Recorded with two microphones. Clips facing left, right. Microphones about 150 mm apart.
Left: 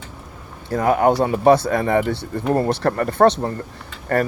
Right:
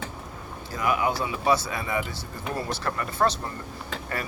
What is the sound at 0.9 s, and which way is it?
Speech, 60° left (ahead or behind).